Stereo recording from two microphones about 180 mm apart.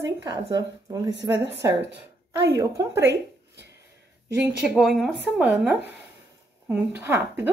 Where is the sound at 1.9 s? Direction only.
70° right (ahead or behind).